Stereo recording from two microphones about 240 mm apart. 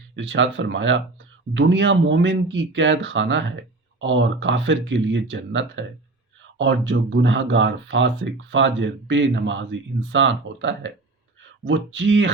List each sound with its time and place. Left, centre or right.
0.2 s speech: right